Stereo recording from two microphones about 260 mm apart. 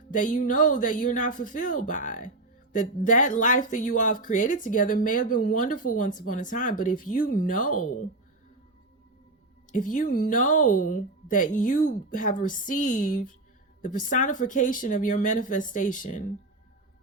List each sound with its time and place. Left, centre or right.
0.1 s speech: left
9.7 s speech: left